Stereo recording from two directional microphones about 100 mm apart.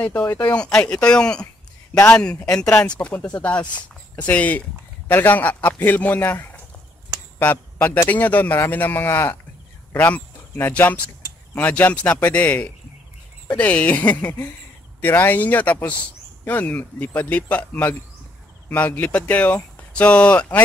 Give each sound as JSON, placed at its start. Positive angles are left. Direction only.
{"t": 0.0, "sound": "speech", "side_deg": 15}